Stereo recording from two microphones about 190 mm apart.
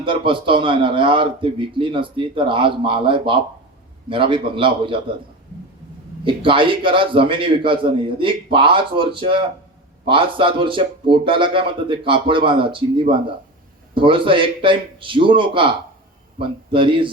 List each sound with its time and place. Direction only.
0.0 s a man's voice: 25° right (ahead or behind)
6.2 s a man's voice: 25° right (ahead or behind)